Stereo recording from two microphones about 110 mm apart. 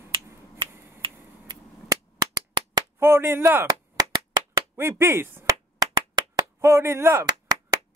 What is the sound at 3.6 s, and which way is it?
Clapping, 35° right (ahead or behind).